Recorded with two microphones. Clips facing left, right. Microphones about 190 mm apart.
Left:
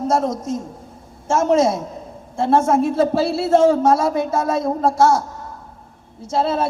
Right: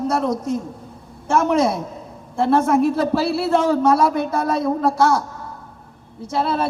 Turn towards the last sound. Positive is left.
turn(degrees=-60)  # may be behind; listen again after turning